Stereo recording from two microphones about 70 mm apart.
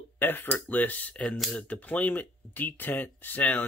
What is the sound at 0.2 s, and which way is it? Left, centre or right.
Speech, left.